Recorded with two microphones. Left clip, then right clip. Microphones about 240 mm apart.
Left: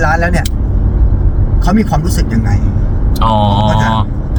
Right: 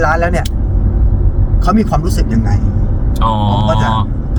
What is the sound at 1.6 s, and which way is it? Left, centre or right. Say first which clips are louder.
Speech: even; centre.